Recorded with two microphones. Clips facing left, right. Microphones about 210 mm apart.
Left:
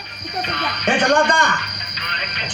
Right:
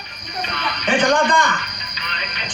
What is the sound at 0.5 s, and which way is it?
Music, 65° left (ahead or behind).